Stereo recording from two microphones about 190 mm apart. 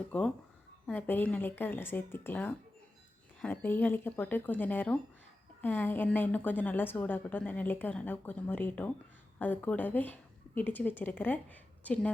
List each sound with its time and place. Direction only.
0.1 s a woman's voice: 5° left (ahead or behind)